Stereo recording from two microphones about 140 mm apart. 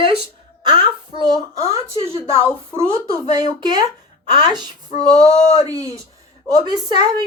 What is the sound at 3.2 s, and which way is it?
A woman's voice, 30° right (ahead or behind).